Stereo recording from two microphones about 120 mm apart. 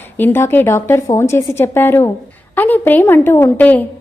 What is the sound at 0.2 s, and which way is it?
A woman's voice, 20° left (ahead or behind).